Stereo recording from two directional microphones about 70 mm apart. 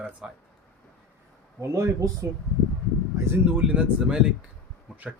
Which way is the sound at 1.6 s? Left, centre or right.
Right.